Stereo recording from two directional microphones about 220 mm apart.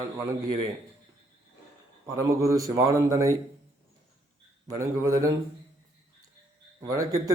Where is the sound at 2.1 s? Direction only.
15° right (ahead or behind).